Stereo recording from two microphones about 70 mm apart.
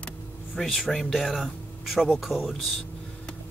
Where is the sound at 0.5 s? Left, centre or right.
Centre.